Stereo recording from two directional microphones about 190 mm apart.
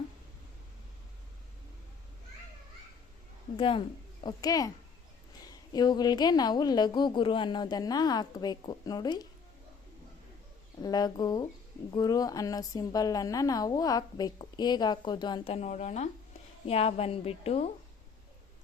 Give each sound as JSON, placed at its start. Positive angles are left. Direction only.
{"t": 3.6, "sound": "a woman's voice", "side_deg": 25}
{"t": 10.8, "sound": "a woman's voice", "side_deg": 20}